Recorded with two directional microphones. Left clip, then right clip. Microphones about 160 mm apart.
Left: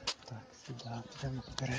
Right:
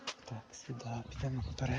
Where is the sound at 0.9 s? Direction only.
25° right (ahead or behind).